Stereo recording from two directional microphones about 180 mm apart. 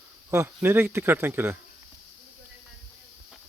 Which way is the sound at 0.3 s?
15° right (ahead or behind).